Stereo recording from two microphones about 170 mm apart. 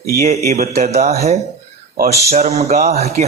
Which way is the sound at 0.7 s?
40° right (ahead or behind).